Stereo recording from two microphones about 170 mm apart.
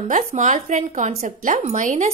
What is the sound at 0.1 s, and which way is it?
A woman's voice, 45° right (ahead or behind).